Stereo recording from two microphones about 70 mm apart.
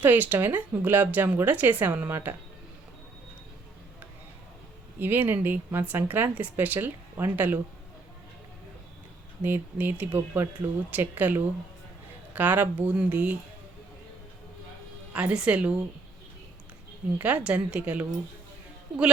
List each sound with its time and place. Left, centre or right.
0.0 s speech: right
4.9 s speech: right
9.4 s speech: right
15.1 s a woman's voice: centre
17.2 s speech: right